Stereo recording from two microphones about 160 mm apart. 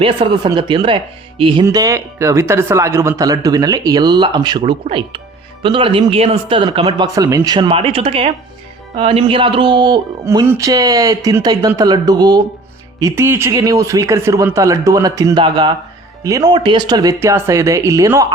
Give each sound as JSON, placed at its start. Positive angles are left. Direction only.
{"t": 0.0, "sound": "speech", "side_deg": -30}
{"t": 1.6, "sound": "speech", "side_deg": -20}